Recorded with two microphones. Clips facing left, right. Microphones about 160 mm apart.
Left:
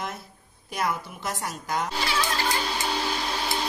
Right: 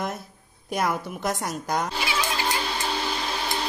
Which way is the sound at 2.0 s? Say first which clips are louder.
Even; 10° right (ahead or behind).